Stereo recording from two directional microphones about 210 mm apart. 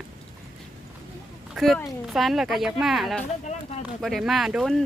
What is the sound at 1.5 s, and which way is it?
Speech, centre (ahead or behind).